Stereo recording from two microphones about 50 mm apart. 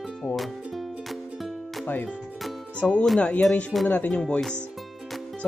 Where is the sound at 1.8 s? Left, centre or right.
Left.